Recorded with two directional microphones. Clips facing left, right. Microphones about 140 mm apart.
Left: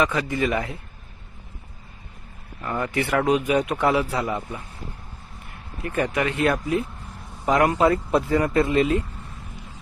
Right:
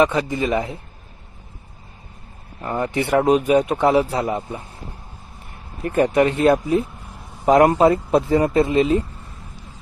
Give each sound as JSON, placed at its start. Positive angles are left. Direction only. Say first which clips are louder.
{"t": 0.0, "sound": "speech", "louder": "right 4 dB", "side_deg": -25}
{"t": 2.6, "sound": "speech", "louder": "right 3 dB", "side_deg": -30}
{"t": 5.8, "sound": "speech", "louder": "right 7 dB", "side_deg": -40}